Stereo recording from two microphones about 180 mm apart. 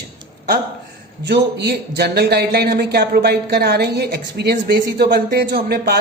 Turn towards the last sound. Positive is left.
turn(degrees=-60)  # may be behind; listen again after turning